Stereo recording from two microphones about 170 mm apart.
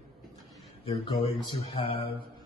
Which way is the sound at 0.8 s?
35° left (ahead or behind).